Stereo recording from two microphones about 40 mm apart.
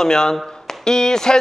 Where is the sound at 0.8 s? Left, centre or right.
Centre.